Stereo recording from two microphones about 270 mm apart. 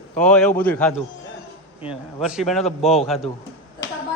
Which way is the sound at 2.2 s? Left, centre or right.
Centre.